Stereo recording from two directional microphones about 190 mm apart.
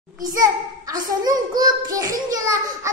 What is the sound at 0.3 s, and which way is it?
A child's voice, 20° right (ahead or behind).